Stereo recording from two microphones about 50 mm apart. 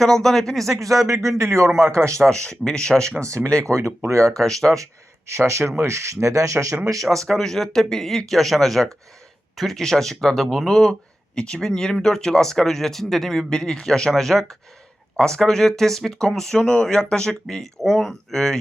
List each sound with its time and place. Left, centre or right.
0.0 s speech: centre
0.8 s speech: right
1.5 s speech: right
2.2 s speech: centre
3.2 s speech: right
3.4 s speech: centre
4.7 s speech: right
7.0 s speech: centre